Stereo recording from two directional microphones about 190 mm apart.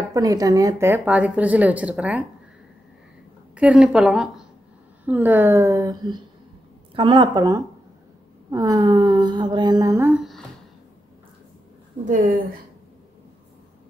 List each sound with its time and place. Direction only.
0.1 s a woman's voice: 20° right (ahead or behind)
3.5 s a woman's voice: 5° right (ahead or behind)
12.0 s a woman's voice: 45° right (ahead or behind)